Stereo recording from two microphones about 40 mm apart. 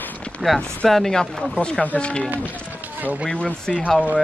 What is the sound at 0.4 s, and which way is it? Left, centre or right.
Speech, centre.